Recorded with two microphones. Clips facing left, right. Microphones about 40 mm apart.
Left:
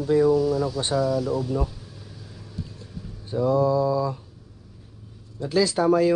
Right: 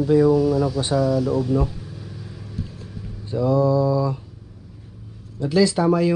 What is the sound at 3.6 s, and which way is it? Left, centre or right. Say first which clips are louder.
Mantra: right 3 dB; centre.